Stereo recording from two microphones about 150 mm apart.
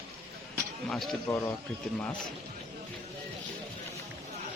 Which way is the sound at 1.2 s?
20° left (ahead or behind).